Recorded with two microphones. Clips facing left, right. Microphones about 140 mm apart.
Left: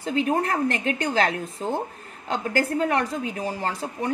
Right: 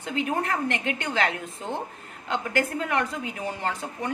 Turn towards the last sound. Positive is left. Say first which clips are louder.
# left 2 dB
turn(degrees=35)  # may be behind; listen again after turning